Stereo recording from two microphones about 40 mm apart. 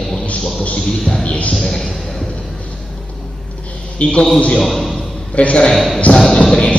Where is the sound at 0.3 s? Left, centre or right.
Left.